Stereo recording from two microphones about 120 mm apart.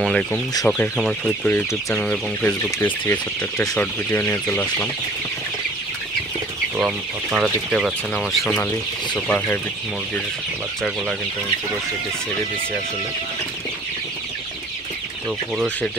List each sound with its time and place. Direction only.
0.0 s speech: 5° left (ahead or behind)
6.8 s speech: 10° right (ahead or behind); by 9.6 s 10° left (ahead or behind)
15.5 s speech: centre (ahead or behind)